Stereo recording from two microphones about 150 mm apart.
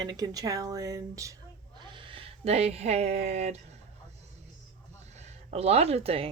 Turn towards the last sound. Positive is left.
turn(degrees=-40)  # may be behind; listen again after turning